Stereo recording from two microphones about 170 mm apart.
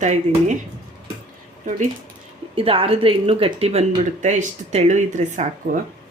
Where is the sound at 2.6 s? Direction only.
35° right (ahead or behind).